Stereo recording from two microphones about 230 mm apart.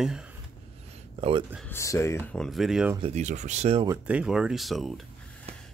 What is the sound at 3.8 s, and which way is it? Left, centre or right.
Speech, centre.